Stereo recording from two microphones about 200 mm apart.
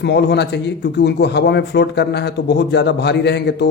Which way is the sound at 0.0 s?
55° left (ahead or behind).